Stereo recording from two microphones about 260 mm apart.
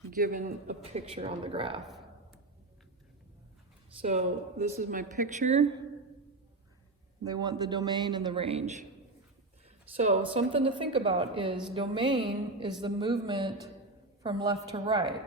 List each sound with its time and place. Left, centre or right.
0.1 s speech: right
4.0 s speech: right
7.3 s a man's voice: centre
10.3 s a man's voice: centre